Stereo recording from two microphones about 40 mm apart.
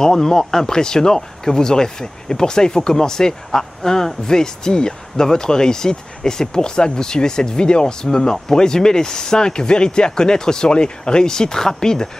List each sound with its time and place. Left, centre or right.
0.0 s speech: centre